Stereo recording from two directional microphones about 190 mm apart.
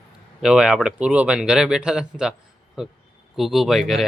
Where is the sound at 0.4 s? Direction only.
5° right (ahead or behind).